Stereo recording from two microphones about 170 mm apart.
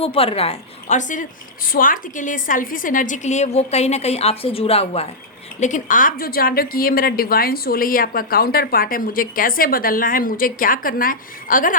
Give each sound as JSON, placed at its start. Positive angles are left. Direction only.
{"t": 0.0, "sound": "a woman's voice", "side_deg": 35}
{"t": 5.5, "sound": "a woman's voice", "side_deg": 45}